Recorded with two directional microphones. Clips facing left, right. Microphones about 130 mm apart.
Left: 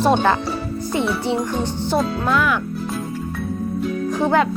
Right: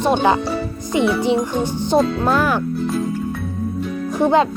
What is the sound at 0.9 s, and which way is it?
Speech, 15° right (ahead or behind).